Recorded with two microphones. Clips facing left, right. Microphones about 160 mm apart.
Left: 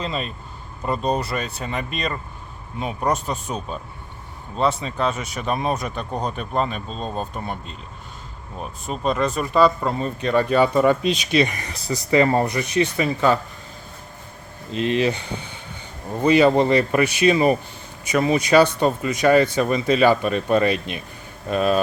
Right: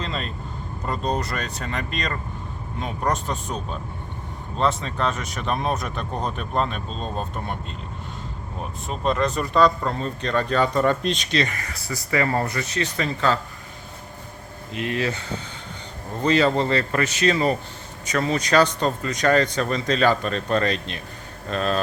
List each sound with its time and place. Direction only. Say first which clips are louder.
0.0 s vehicle: left 3 dB; 10° left (ahead or behind)
0.9 s speech: left 3 dB; 10° left (ahead or behind)
8.9 s speech: left 1 dB; centre (ahead or behind)
14.7 s speech: left 5 dB; 25° left (ahead or behind); by 21.8 s 10° left (ahead or behind)